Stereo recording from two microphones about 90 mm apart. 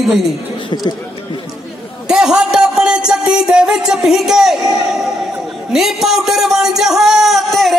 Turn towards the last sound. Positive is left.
turn(degrees=0)  # may be behind; listen again after turning